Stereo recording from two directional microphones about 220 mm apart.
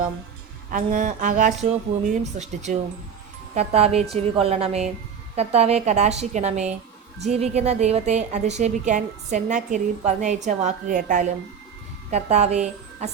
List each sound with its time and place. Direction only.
0.7 s a woman's voice: 35° right (ahead or behind)